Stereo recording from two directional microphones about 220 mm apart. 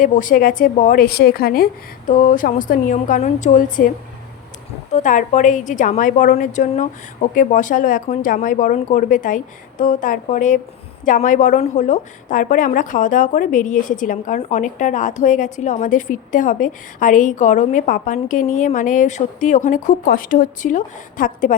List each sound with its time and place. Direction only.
0.0 s a woman's voice: 40° left (ahead or behind)
4.9 s a woman's voice: 35° left (ahead or behind)